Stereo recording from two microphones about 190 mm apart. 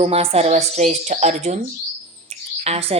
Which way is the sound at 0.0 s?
30° right (ahead or behind).